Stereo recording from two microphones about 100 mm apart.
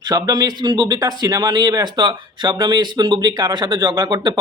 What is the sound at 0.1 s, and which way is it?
Speech, 40° right (ahead or behind).